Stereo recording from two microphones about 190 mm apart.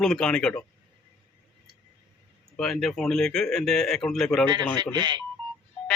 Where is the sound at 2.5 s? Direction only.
Centre (ahead or behind).